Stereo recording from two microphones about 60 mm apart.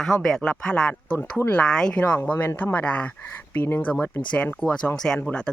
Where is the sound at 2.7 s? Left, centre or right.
Left.